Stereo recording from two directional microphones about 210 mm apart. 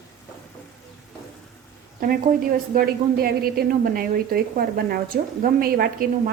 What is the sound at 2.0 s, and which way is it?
A woman's voice, 45° right (ahead or behind).